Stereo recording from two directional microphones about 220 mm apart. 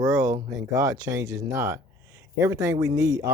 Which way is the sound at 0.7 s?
15° right (ahead or behind).